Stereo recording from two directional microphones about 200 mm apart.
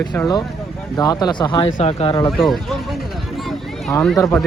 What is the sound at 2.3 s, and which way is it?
Speech, centre (ahead or behind).